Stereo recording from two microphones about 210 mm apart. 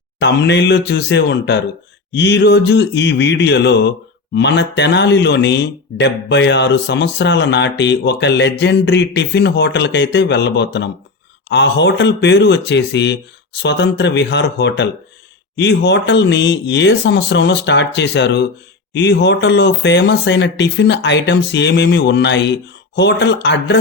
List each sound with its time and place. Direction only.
0.2 s speech: 55° left (ahead or behind)